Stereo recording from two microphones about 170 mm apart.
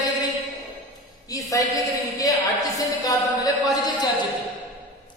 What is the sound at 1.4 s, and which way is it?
A woman's voice, 20° left (ahead or behind).